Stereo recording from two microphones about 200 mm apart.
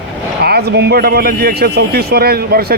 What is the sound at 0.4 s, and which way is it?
A man's voice, 55° right (ahead or behind).